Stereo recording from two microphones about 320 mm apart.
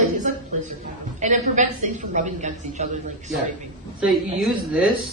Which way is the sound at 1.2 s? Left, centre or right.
Right.